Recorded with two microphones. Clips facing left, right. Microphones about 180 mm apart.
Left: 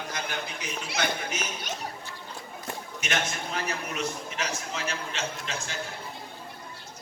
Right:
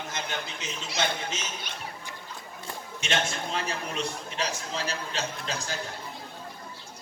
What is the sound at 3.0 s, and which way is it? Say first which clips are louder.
A man's voice: right 2 dB; 30° right (ahead or behind).